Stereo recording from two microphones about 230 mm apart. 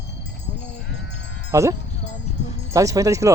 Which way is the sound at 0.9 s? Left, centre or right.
Left.